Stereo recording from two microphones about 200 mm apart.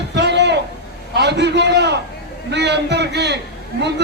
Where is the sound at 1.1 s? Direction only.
55° right (ahead or behind).